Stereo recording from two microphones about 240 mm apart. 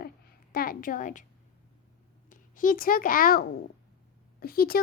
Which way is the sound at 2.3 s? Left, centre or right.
Left.